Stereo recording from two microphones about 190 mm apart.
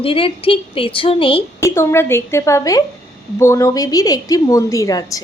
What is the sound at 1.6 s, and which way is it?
A woman's voice, 15° left (ahead or behind).